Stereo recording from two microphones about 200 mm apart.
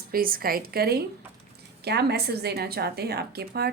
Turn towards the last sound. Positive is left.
turn(degrees=-50)  # may be behind; listen again after turning